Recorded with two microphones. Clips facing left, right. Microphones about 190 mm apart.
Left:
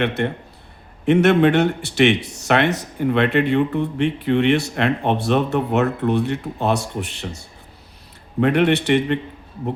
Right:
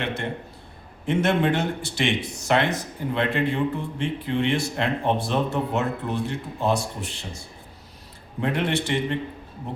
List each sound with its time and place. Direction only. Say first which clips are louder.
0.0 s a man's voice: left 7 dB; 60° left (ahead or behind)
8.4 s speech: left 8 dB; 65° left (ahead or behind)